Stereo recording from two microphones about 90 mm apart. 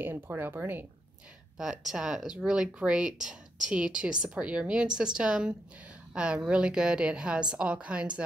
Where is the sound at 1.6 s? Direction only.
5° right (ahead or behind).